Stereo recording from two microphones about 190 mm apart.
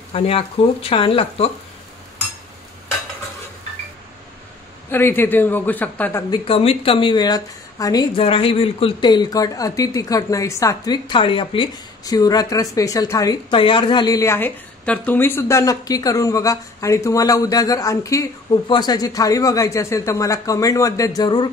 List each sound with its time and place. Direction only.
0.1 s a woman's voice: 30° left (ahead or behind)
4.9 s a man's voice: 10° left (ahead or behind)
6.3 s a woman's voice: 30° left (ahead or behind)